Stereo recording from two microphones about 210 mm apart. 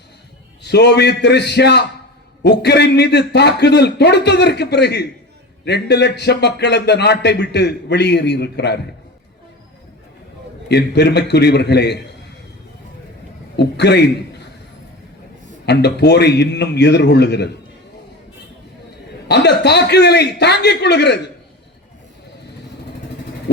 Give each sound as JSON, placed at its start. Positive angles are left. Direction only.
{"t": 0.6, "sound": "speech", "side_deg": 55}
{"t": 10.7, "sound": "speech", "side_deg": 50}
{"t": 13.6, "sound": "a man's voice", "side_deg": 55}
{"t": 15.6, "sound": "speech", "side_deg": 50}
{"t": 19.3, "sound": "speech", "side_deg": 55}